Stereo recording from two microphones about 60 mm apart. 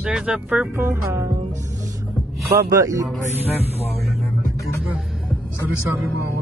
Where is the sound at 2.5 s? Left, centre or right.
Right.